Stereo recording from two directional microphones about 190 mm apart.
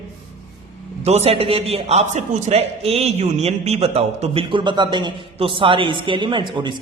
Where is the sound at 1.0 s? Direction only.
35° right (ahead or behind).